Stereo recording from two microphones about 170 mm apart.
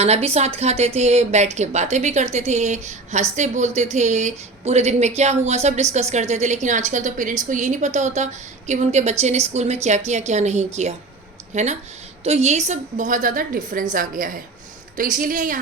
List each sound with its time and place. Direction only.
0.0 s a woman's voice: 40° right (ahead or behind)